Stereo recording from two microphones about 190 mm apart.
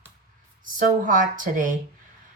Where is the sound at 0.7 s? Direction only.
45° right (ahead or behind).